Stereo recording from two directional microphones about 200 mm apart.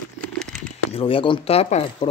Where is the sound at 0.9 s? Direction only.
30° left (ahead or behind).